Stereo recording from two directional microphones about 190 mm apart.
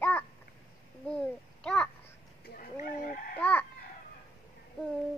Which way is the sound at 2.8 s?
50° left (ahead or behind).